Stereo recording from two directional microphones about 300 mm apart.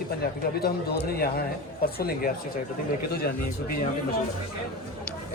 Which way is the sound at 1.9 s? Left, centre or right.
Left.